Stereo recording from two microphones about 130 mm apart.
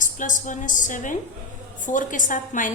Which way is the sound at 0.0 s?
80° left.